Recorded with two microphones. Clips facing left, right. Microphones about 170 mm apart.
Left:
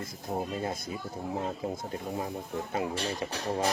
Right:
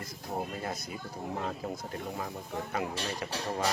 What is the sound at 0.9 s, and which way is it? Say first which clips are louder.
Speech: left 3 dB; 25° left (ahead or behind).